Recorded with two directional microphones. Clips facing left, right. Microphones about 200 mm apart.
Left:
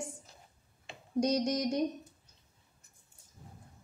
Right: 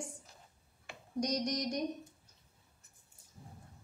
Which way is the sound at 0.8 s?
25° left (ahead or behind).